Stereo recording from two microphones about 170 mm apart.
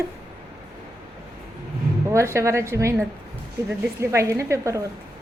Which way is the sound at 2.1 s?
15° right (ahead or behind).